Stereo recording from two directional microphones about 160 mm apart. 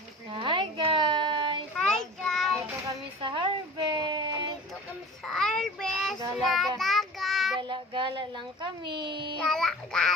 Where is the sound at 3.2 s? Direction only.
30° right (ahead or behind).